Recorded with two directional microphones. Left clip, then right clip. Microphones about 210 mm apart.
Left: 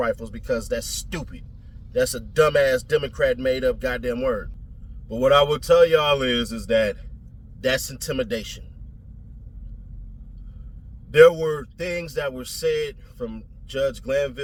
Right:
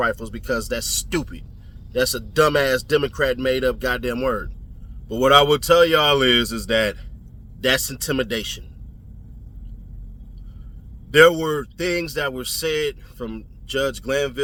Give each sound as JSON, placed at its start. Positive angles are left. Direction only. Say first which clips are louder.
{"t": 0.0, "sound": "speech", "louder": "right 2 dB", "side_deg": -20}
{"t": 11.1, "sound": "speech", "louder": "even", "side_deg": -20}